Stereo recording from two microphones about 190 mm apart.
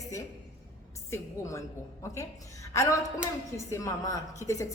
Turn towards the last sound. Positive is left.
turn(degrees=15)  # may be behind; listen again after turning